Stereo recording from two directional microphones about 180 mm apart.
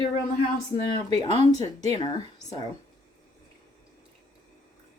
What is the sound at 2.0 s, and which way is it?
Speech, 25° left (ahead or behind).